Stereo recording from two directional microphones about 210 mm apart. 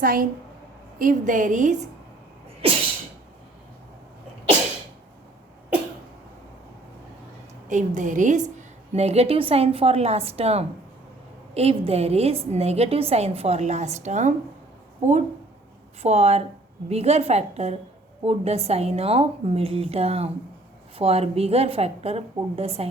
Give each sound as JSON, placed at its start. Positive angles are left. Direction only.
{"t": 0.0, "sound": "a woman's voice", "side_deg": -40}
{"t": 7.7, "sound": "a woman's voice", "side_deg": -35}
{"t": 16.0, "sound": "a woman's voice", "side_deg": -30}